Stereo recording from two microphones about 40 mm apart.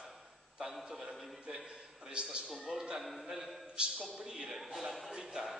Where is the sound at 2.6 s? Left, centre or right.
Centre.